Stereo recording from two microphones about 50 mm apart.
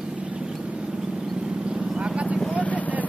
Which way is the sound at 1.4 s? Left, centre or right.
Centre.